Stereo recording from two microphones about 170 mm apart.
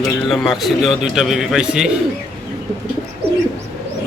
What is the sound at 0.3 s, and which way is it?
A man's voice, centre (ahead or behind).